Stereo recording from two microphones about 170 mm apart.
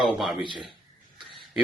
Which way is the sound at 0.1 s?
Centre (ahead or behind).